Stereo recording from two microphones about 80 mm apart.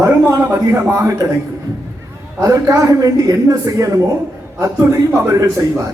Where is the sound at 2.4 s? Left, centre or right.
Right.